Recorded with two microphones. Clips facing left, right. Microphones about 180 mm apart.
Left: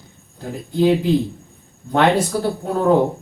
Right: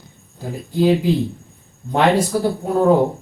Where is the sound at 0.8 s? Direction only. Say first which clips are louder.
Even; 10° right (ahead or behind).